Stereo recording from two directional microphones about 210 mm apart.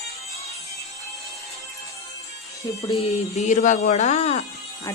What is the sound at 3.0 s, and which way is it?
Speech, 30° left (ahead or behind).